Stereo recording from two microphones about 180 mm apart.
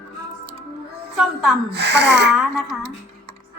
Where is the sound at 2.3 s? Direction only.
5° right (ahead or behind).